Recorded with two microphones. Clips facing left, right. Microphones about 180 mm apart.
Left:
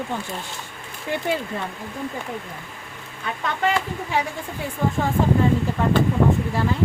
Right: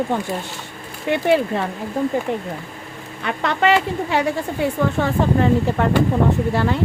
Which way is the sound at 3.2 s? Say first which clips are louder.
Right 5 dB; 80° right.